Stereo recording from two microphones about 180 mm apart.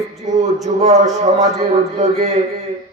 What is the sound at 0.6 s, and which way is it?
A man's voice, 35° right (ahead or behind).